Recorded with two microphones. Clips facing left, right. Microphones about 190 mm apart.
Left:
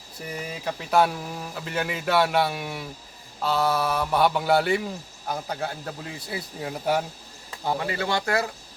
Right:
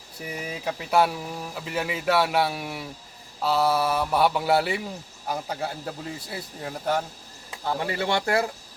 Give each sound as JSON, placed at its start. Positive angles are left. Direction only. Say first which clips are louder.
{"t": 0.2, "sound": "speech", "louder": "even", "side_deg": -5}
{"t": 7.9, "sound": "speech", "louder": "right 4 dB", "side_deg": -25}